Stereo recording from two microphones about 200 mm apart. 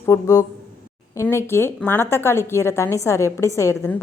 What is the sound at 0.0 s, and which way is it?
A woman's voice, 15° left (ahead or behind).